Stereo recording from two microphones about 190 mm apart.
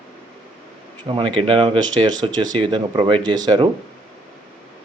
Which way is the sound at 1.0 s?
25° right (ahead or behind).